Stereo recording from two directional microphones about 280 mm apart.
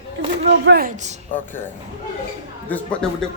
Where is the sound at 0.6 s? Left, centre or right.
Right.